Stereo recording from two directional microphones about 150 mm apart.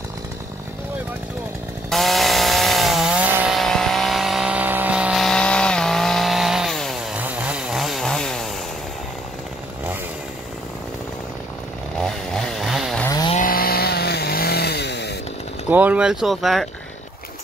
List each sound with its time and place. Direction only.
1.9 s chainsaw: centre (ahead or behind)
7.2 s chainsaw: 10° right (ahead or behind)
12.0 s chainsaw: 5° left (ahead or behind)
13.4 s chainsaw: 75° left (ahead or behind)
15.7 s speech: 10° right (ahead or behind)